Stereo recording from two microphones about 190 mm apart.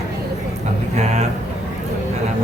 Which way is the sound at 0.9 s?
35° right (ahead or behind).